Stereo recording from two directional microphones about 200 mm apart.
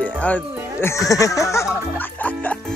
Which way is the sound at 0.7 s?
15° left (ahead or behind).